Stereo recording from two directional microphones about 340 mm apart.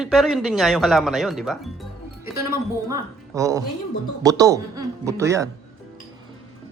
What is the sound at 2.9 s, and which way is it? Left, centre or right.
A woman's voice, centre.